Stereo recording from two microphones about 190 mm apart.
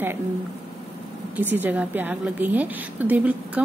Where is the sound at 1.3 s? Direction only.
10° right (ahead or behind).